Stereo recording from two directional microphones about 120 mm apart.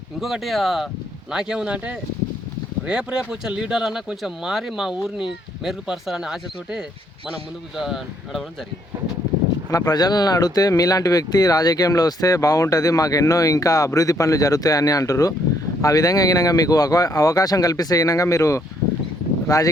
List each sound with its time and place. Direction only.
0.2 s speech: centre (ahead or behind)
9.6 s speech: 30° left (ahead or behind)